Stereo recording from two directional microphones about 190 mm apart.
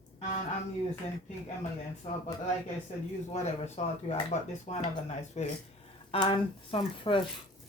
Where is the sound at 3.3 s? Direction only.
35° left (ahead or behind).